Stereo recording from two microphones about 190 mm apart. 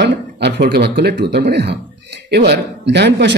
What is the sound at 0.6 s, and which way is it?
A man's voice, 55° right (ahead or behind).